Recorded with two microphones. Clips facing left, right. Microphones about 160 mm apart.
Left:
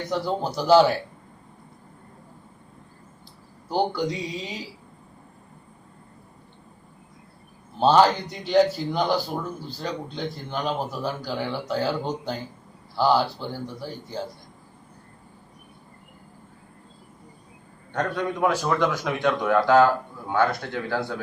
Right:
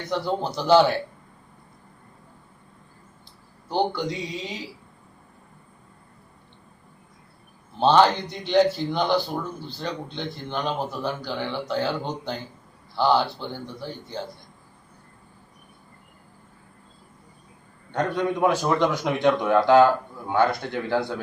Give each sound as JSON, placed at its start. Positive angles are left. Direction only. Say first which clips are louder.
{"t": 0.1, "sound": "speech", "louder": "right 1 dB", "side_deg": 5}
{"t": 3.7, "sound": "speech", "louder": "even", "side_deg": 5}
{"t": 7.8, "sound": "speech", "louder": "even", "side_deg": 5}
{"t": 17.9, "sound": "a man's voice", "louder": "right 2 dB", "side_deg": -15}